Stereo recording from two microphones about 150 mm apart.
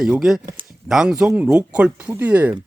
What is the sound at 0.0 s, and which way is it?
Speech, 5° right (ahead or behind).